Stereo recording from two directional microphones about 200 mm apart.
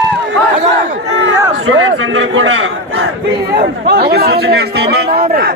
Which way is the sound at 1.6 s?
70° right (ahead or behind).